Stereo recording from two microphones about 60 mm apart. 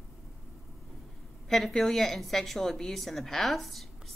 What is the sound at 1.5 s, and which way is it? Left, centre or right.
A woman's voice, centre.